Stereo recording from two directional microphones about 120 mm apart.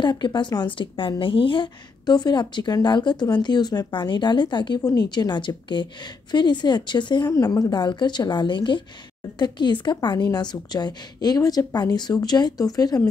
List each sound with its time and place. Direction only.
0.0 s a woman's voice: 40° left (ahead or behind)